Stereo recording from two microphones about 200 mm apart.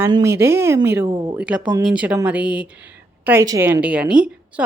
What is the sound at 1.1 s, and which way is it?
Speech, 25° right (ahead or behind).